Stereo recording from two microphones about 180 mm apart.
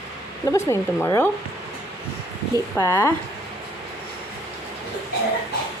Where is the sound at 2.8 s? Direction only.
15° left (ahead or behind).